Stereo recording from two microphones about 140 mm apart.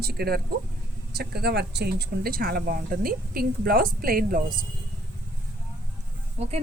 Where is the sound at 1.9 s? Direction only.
90° right.